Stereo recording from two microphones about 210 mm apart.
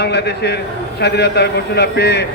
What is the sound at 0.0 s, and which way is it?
A man's voice, 50° left (ahead or behind).